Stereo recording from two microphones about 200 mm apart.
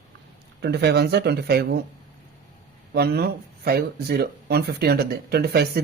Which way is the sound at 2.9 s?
50° right (ahead or behind).